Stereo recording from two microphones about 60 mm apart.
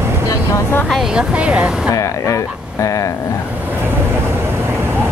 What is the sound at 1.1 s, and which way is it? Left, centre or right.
Speech, centre.